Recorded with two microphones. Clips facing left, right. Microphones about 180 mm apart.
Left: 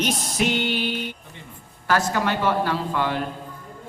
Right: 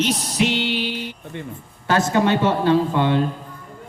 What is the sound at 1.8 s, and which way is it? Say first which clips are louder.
Speech: right 4 dB; 20° right (ahead or behind).